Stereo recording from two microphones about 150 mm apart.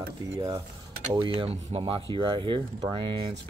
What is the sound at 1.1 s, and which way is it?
Speech, 30° right (ahead or behind).